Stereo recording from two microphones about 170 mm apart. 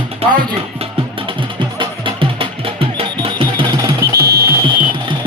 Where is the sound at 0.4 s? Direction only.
35° right (ahead or behind).